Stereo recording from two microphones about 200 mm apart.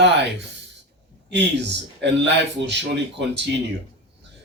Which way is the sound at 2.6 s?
60° right (ahead or behind).